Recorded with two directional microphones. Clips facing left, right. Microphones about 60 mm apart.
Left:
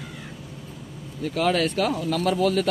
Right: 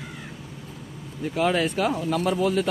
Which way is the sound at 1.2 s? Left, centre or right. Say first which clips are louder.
Even; centre.